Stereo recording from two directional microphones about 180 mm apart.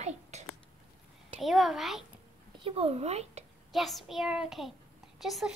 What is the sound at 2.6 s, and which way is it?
Speech, 35° right (ahead or behind).